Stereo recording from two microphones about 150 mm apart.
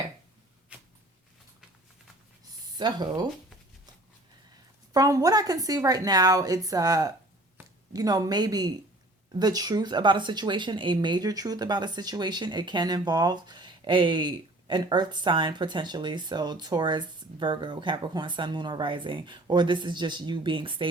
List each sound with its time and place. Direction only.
0.7 s a sound: 10° right (ahead or behind)
2.7 s speech: 30° right (ahead or behind)
4.9 s speech: 25° right (ahead or behind)